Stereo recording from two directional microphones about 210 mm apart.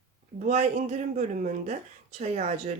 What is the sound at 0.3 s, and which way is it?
Speech, 35° right (ahead or behind).